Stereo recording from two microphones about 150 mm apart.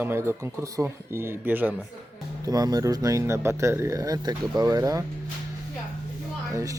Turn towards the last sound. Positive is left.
turn(degrees=-20)  # may be behind; listen again after turning